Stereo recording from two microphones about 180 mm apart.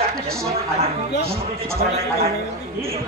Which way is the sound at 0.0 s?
55° right (ahead or behind).